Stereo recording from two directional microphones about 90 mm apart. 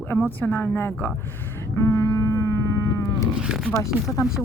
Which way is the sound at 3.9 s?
20° right (ahead or behind).